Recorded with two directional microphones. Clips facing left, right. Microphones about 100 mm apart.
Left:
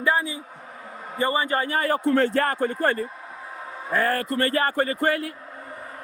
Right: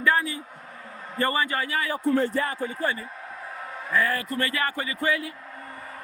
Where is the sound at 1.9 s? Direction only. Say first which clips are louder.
Left 3 dB; 75° left (ahead or behind); by 4.3 s 50° left (ahead or behind).